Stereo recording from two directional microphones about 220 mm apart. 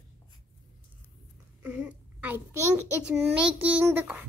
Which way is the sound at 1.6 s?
5° right (ahead or behind).